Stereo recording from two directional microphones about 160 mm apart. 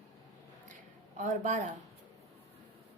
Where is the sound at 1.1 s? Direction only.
50° right (ahead or behind).